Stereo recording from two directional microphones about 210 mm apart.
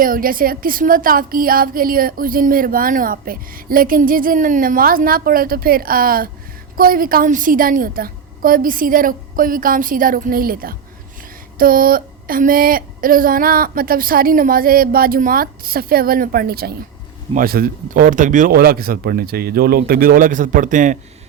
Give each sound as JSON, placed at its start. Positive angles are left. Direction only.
{"t": 0.0, "sound": "a woman's voice", "side_deg": -40}